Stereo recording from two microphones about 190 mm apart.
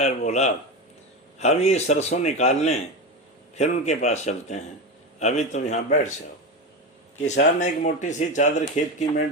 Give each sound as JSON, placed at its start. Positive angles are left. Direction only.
{"t": 0.0, "sound": "speech", "side_deg": 35}
{"t": 7.6, "sound": "speech", "side_deg": 40}